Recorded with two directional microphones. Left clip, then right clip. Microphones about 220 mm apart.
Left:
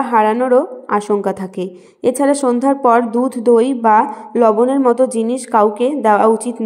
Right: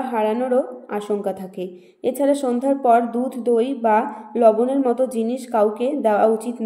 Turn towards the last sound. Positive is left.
turn(degrees=30)  # may be behind; listen again after turning